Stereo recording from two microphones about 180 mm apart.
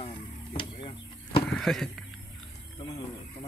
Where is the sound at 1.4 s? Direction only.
5° left (ahead or behind).